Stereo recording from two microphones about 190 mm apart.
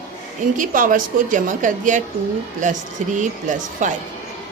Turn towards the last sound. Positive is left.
turn(degrees=-40)  # may be behind; listen again after turning